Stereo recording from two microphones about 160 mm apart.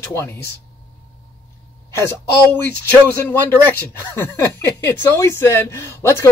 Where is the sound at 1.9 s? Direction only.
15° left (ahead or behind).